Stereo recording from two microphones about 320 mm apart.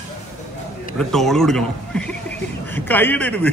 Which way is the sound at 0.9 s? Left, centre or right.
Centre.